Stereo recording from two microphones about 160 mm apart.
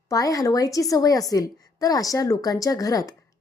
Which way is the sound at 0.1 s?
20° left (ahead or behind).